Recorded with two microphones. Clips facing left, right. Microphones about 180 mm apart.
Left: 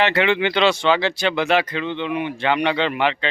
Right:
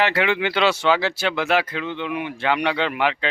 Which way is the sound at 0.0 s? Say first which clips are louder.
Left 2 dB; 5° right (ahead or behind).